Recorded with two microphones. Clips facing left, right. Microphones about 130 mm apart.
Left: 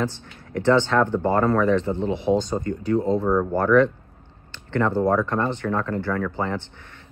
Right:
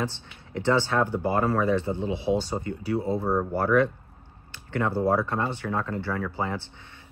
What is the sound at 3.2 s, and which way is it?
Speech, 90° left.